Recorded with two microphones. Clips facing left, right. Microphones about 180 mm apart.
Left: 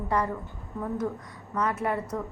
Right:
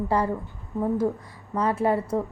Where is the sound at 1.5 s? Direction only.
30° right (ahead or behind).